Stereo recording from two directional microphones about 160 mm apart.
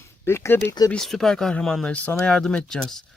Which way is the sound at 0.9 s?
5° left (ahead or behind).